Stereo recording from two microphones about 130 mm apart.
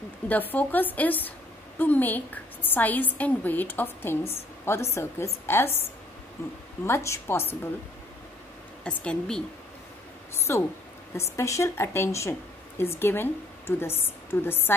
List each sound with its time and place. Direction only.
0.3 s a woman's voice: 15° left (ahead or behind)
8.8 s a woman's voice: 10° left (ahead or behind)
10.5 s a woman's voice: 20° left (ahead or behind)